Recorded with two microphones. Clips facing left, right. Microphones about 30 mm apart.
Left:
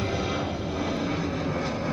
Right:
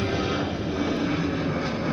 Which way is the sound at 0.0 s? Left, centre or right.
Right.